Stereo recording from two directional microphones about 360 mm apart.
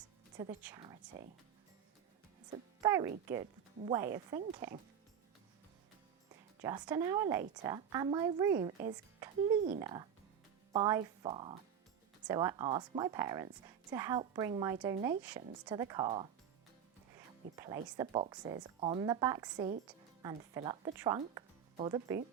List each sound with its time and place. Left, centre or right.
0.6 s speech: centre
2.8 s a woman's voice: centre
6.6 s a woman's voice: centre
17.2 s music: centre
17.9 s a woman's voice: centre